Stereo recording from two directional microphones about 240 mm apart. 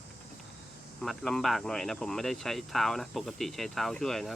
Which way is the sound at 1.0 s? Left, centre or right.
Centre.